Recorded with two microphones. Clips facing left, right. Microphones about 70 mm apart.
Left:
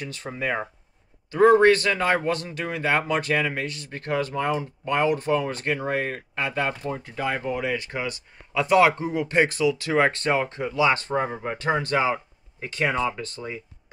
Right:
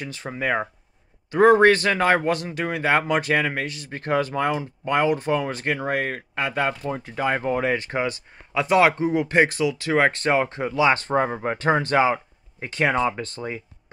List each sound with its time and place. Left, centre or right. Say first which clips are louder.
0.0 s speech: right 2 dB; right
6.0 s speech: right 2 dB; right
6.8 s speech: right 2 dB; centre
7.2 s speech: right 4 dB; right
8.5 s speech: even; centre